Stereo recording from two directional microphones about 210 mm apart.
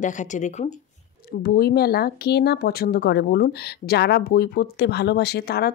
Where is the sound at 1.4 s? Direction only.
45° left (ahead or behind).